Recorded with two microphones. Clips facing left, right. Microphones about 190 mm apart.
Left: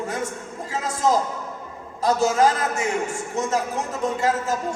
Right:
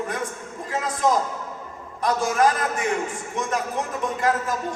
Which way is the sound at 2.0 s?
25° left (ahead or behind).